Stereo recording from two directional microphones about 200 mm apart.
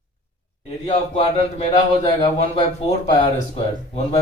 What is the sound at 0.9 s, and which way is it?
Speech, 30° left (ahead or behind).